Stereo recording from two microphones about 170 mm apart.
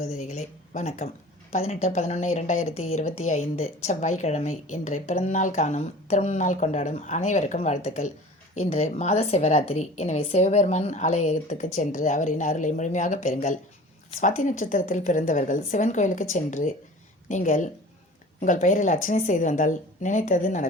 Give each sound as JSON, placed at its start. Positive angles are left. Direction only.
{"t": 0.0, "sound": "speech", "side_deg": 45}